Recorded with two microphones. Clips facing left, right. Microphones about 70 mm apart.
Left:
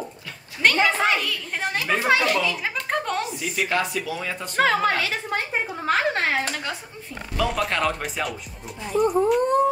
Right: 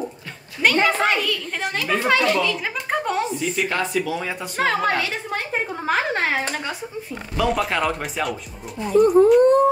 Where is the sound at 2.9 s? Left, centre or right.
Centre.